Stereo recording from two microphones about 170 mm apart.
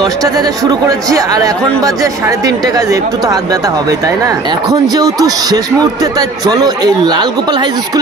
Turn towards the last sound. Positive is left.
turn(degrees=-25)  # may be behind; listen again after turning